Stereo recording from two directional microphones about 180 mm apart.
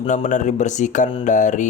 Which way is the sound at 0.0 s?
45° left (ahead or behind).